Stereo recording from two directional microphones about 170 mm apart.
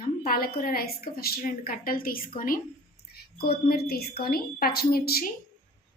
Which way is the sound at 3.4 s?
65° left (ahead or behind).